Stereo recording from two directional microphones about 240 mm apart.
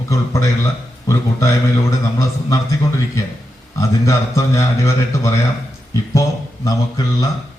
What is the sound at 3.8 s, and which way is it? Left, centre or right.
A man's voice, centre.